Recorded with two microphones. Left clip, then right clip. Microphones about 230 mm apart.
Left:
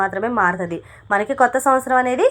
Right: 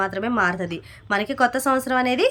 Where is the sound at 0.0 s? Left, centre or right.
Right.